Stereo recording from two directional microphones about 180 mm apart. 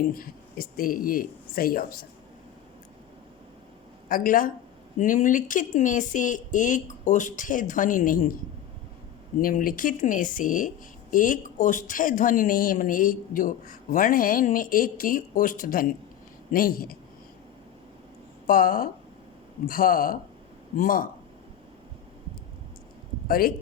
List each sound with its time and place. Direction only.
0.1 s speech: 55° left (ahead or behind)
4.1 s speech: 50° left (ahead or behind)
9.4 s speech: 50° left (ahead or behind)
18.4 s speech: 50° left (ahead or behind)